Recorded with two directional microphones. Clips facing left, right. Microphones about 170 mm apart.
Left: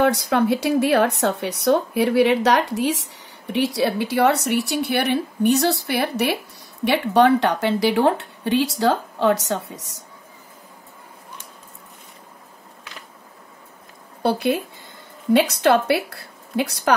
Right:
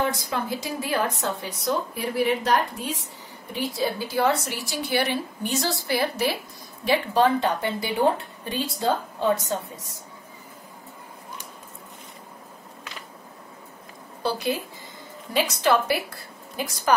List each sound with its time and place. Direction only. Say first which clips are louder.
0.0 s speech: left 8 dB; 70° left (ahead or behind); by 3.1 s 90° left
3.5 s speech: left 6 dB; 80° left
14.2 s a woman's voice: left 6 dB; 60° left (ahead or behind)